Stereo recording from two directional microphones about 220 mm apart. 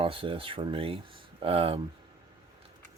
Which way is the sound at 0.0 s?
25° right (ahead or behind).